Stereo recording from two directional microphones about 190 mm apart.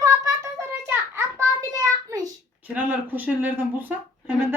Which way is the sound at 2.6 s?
10° right (ahead or behind).